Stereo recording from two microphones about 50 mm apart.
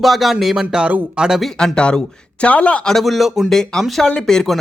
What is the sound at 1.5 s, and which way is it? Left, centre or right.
Speech, centre.